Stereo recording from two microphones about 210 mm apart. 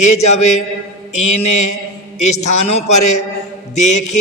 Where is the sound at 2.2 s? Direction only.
35° left (ahead or behind).